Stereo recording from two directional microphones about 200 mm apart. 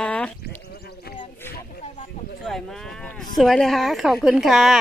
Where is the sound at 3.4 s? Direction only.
Centre (ahead or behind).